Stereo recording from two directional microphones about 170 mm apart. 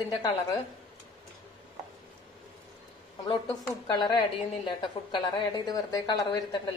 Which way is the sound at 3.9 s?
25° left (ahead or behind).